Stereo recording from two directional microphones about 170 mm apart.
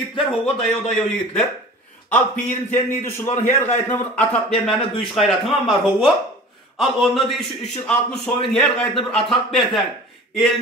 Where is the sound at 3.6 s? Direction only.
45° left (ahead or behind).